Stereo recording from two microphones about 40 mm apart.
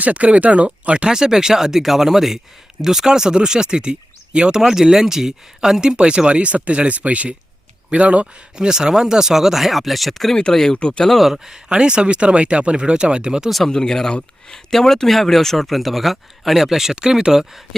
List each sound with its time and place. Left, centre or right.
0.0 s speech: right
1.0 s speech: centre; by 8.3 s right
8.5 s speech: centre
10.3 s speech: centre
11.3 s speech: centre
11.7 s speech: right
13.7 s speech: centre
16.9 s speech: centre